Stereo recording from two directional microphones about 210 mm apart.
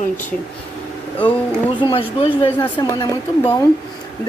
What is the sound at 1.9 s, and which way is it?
A woman's voice, 25° left (ahead or behind).